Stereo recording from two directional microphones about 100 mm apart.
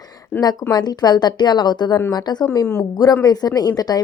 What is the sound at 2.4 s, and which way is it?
Speech, 30° left (ahead or behind).